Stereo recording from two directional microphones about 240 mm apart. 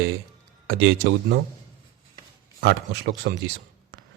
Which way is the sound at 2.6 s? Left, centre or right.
Right.